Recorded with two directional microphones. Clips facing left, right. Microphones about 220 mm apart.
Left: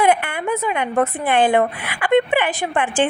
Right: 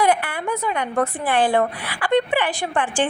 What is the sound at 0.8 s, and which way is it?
A woman's voice, 20° left (ahead or behind).